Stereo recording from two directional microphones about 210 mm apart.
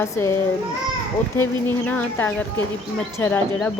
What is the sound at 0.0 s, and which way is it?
Speech, 10° left (ahead or behind).